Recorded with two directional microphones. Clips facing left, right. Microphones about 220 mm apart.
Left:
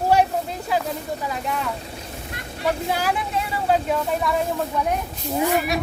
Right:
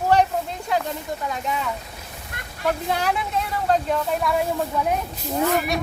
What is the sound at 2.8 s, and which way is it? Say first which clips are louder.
Speech: even; 5° left (ahead or behind).